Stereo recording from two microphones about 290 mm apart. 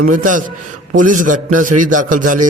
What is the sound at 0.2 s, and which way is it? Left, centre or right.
A man's voice, right.